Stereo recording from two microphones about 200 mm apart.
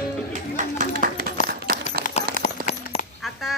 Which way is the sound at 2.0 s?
35° left (ahead or behind).